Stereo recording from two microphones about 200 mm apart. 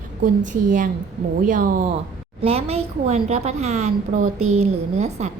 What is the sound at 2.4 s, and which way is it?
A woman's voice, 30° right (ahead or behind).